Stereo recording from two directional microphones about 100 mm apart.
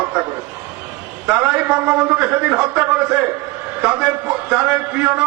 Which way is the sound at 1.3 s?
10° right (ahead or behind).